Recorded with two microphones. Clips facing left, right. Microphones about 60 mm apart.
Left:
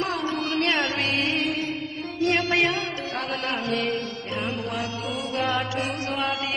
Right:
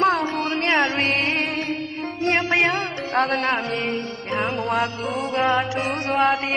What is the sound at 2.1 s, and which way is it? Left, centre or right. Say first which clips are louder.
Music: right 2 dB; right.